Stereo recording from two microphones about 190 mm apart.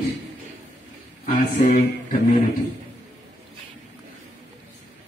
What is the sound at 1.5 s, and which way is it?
Speech, 45° left (ahead or behind).